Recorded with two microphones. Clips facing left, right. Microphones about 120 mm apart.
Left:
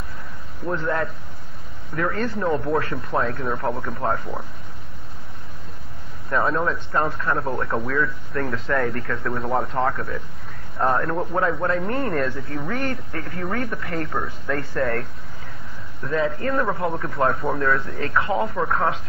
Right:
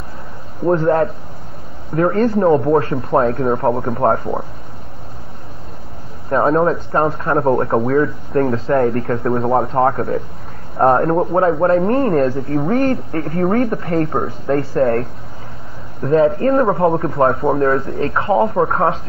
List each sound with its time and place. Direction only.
0.7 s speech: 40° right (ahead or behind)
6.3 s speech: 35° right (ahead or behind)